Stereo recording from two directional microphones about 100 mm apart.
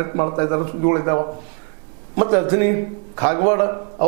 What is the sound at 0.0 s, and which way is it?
A man's voice, 20° right (ahead or behind).